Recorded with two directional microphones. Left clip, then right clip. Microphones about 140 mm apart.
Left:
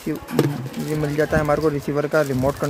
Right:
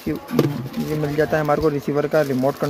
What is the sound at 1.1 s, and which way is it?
Speech, 5° right (ahead or behind).